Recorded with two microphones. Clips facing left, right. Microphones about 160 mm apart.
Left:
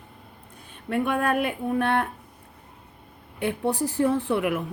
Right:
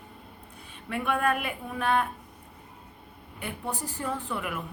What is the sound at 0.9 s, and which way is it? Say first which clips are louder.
Speech: left 4 dB; 45° left (ahead or behind).